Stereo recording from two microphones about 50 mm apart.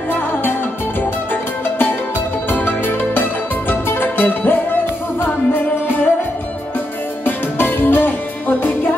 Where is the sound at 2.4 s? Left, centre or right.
Left.